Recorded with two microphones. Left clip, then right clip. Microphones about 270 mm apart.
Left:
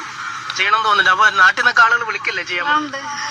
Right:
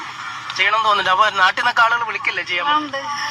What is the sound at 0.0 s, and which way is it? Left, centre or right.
A man's voice, centre.